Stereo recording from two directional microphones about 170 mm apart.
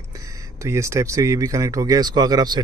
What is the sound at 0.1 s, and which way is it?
Speech, 20° right (ahead or behind).